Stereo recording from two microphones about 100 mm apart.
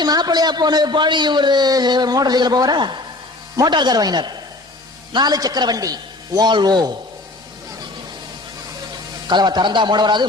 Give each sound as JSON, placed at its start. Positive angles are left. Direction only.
{"t": 0.0, "sound": "a man's voice", "side_deg": -45}
{"t": 9.2, "sound": "a man's voice", "side_deg": -45}